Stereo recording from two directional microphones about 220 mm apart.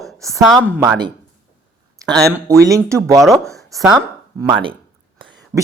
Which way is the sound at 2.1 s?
15° right (ahead or behind).